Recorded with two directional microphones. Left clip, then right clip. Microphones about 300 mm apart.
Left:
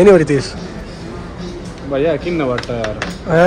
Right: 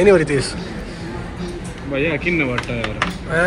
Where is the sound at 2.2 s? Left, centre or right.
Centre.